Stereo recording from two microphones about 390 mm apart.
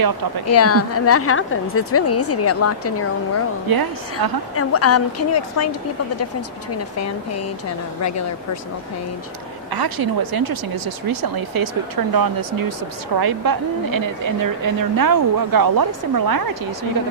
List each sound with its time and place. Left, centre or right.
0.5 s a woman's voice: left
3.7 s a woman's voice: right
4.5 s a woman's voice: left
6.7 s a woman's voice: left
9.7 s a woman's voice: right